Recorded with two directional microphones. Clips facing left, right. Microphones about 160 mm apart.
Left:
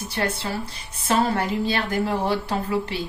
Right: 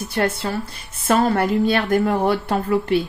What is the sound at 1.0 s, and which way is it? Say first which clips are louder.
A woman's voice: right 4 dB; 50° right (ahead or behind).